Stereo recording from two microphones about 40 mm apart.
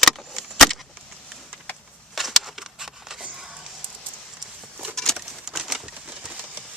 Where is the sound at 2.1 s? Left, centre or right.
Centre.